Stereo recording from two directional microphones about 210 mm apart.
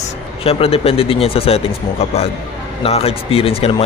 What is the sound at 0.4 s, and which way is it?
Speech, 25° left (ahead or behind).